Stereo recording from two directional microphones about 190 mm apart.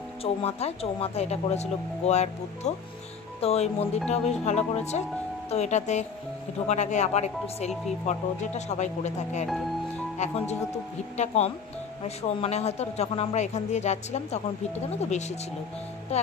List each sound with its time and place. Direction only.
0.2 s speech: 30° left (ahead or behind)